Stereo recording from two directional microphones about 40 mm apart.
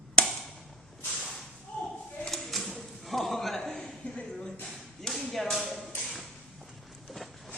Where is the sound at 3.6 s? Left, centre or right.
Centre.